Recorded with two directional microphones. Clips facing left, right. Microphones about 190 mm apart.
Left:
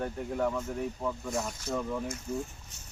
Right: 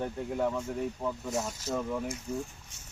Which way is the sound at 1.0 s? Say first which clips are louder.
Even; 20° right (ahead or behind).